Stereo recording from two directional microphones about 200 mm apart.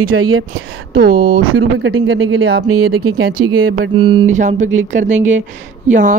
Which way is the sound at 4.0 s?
25° right (ahead or behind).